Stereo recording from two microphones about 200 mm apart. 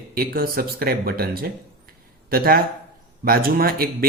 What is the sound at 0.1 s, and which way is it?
A man's voice, 50° right (ahead or behind).